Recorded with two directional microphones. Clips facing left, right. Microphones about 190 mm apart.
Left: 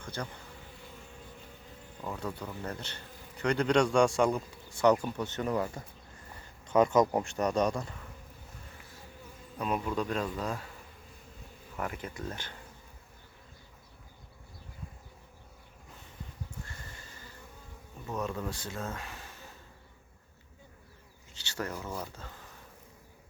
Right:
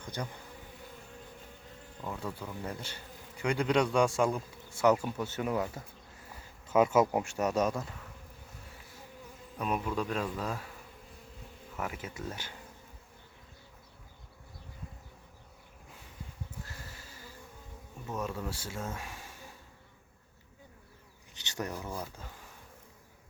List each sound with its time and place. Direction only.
0.0 s bee: 15° right (ahead or behind)
2.0 s a man's voice: centre (ahead or behind)
9.6 s speech: 5° right (ahead or behind)
11.8 s speech: 5° right (ahead or behind)
16.6 s horse: 5° right (ahead or behind)
18.0 s speech: 5° right (ahead or behind)
21.3 s speech: 15° right (ahead or behind)